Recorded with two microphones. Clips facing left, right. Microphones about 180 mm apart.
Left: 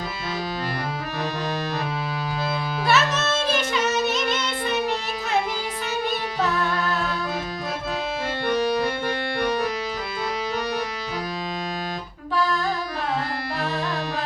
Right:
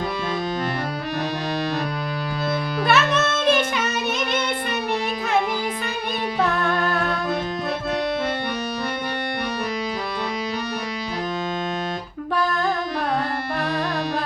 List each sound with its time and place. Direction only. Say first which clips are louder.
2.8 s music: right 2 dB; 55° right (ahead or behind)
6.4 s music: right 3 dB; 55° right (ahead or behind)